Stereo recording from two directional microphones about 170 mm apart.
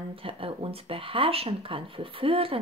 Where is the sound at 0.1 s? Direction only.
35° right (ahead or behind).